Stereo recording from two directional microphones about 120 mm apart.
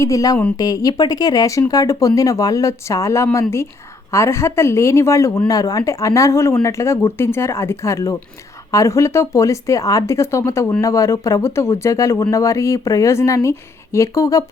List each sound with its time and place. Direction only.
0.0 s speech: 30° left (ahead or behind)